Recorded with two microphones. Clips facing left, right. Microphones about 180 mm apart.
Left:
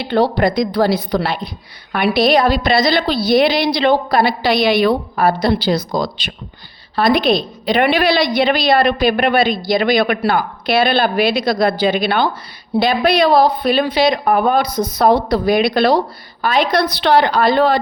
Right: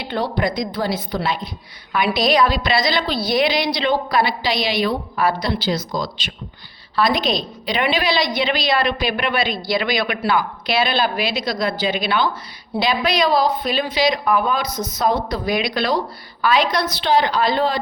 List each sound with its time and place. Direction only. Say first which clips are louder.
0.3 s a woman's voice: left 7 dB; 70° left (ahead or behind)
14.7 s a woman's voice: left 7 dB; 30° left (ahead or behind)
14.9 s a woman's voice: left 7 dB; 65° left (ahead or behind)
16.7 s a woman's voice: left 5 dB; 65° left (ahead or behind)